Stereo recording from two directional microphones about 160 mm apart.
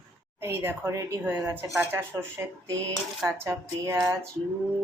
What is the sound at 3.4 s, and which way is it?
Speech, 20° right (ahead or behind).